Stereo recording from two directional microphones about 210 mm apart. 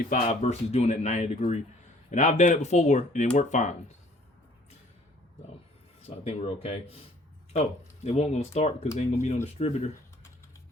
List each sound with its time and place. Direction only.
0.1 s speech: 30° left (ahead or behind)
6.1 s speech: 30° left (ahead or behind)